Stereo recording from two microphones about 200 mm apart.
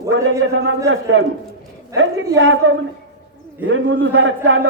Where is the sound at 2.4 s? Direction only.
80° right.